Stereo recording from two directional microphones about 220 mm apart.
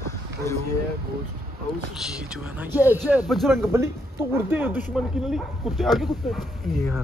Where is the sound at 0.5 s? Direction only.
15° left (ahead or behind).